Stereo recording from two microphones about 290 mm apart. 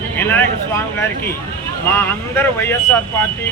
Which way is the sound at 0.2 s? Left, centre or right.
Centre.